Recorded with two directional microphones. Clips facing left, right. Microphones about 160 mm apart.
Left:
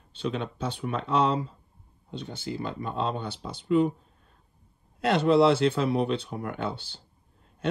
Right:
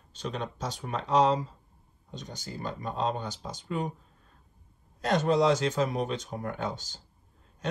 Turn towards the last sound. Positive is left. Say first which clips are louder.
# left 2 dB
turn(degrees=-45)  # may be behind; listen again after turning